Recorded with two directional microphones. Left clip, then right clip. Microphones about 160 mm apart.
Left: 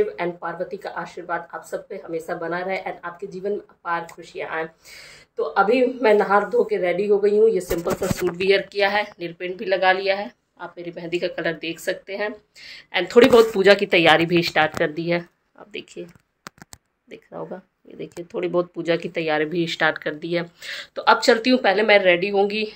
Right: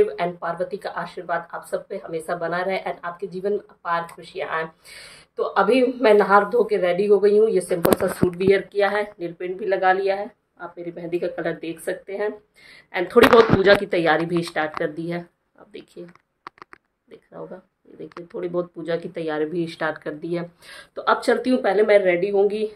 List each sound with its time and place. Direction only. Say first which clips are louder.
0.1 s speech: right 2 dB; 5° right (ahead or behind)
8.7 s a woman's voice: even; 20° right (ahead or behind)
9.4 s speech: left 1 dB; 5° left (ahead or behind)
13.7 s speech: left 2 dB; 15° left (ahead or behind)
17.1 s speech: left 4 dB; 30° left (ahead or behind); by 19.6 s 10° left (ahead or behind)
19.6 s speech: left 5 dB; centre (ahead or behind)